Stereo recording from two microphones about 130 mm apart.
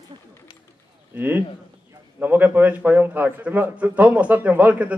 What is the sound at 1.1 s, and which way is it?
A man's voice, 15° right (ahead or behind).